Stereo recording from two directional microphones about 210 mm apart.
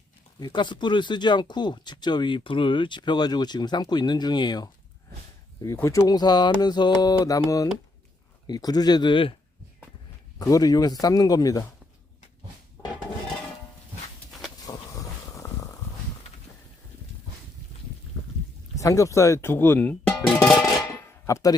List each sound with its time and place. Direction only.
0.3 s speech: 20° left (ahead or behind)
10.3 s speech: 15° left (ahead or behind)
14.3 s a sound: centre (ahead or behind)
14.7 s a sound: 15° left (ahead or behind)
18.8 s speech: 15° left (ahead or behind)
21.2 s speech: 15° left (ahead or behind)